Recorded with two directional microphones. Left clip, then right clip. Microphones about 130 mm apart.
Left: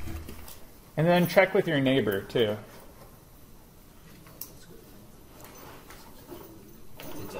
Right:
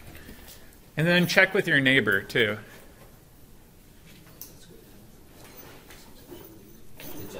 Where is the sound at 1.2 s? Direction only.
10° right (ahead or behind).